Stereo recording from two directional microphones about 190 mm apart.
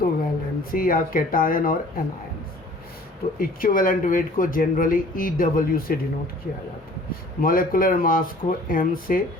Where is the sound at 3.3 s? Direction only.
50° left (ahead or behind).